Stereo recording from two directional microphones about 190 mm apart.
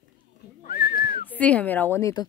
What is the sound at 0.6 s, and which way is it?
Whistling, 55° left (ahead or behind).